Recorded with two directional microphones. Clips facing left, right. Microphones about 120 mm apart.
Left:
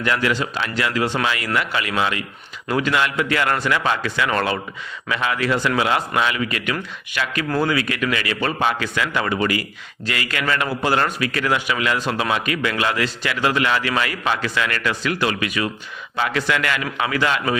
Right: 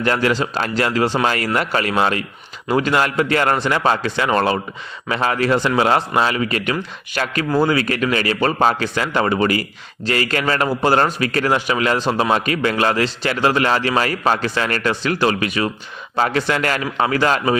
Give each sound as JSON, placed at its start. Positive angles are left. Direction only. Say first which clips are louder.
{"t": 0.0, "sound": "a man's voice", "louder": "right 3 dB", "side_deg": -35}